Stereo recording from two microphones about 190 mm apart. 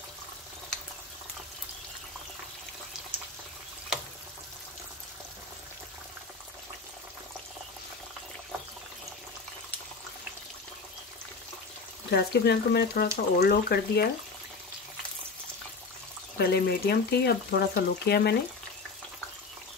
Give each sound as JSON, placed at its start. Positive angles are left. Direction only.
{"t": 12.1, "sound": "speech", "side_deg": 60}
{"t": 16.3, "sound": "speech", "side_deg": 60}